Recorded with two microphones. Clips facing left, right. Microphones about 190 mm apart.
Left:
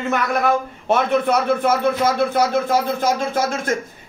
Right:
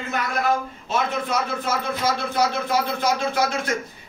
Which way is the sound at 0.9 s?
60° left (ahead or behind).